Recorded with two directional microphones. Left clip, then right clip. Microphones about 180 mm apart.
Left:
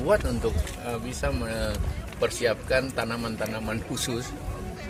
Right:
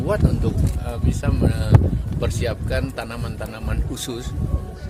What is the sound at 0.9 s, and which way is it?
Speech, 35° right (ahead or behind).